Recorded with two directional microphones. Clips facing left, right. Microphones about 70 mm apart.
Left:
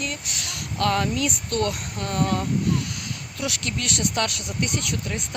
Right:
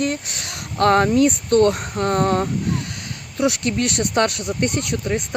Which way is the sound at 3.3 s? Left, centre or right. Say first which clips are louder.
Right 10 dB; right.